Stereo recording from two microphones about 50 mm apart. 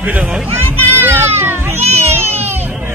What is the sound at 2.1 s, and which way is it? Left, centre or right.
Music, right.